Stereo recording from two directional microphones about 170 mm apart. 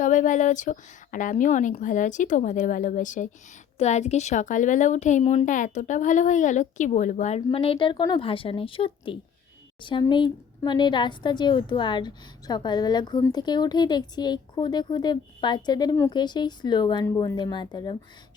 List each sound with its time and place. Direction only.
0.0 s a woman's voice: 50° left (ahead or behind)
7.4 s a woman's voice: 35° left (ahead or behind)